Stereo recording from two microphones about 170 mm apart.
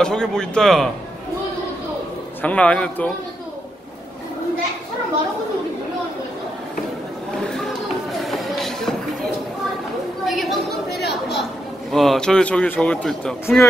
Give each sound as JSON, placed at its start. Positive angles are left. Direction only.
{"t": 0.0, "sound": "a man's voice", "side_deg": 5}
{"t": 2.4, "sound": "a man's voice", "side_deg": 5}
{"t": 7.4, "sound": "a sound", "side_deg": 5}
{"t": 8.2, "sound": "music", "side_deg": 0}
{"t": 10.2, "sound": "chatter", "side_deg": 0}
{"t": 11.9, "sound": "a man's voice", "side_deg": 0}